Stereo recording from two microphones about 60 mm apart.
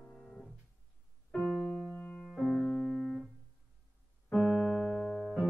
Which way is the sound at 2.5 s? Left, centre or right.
Centre.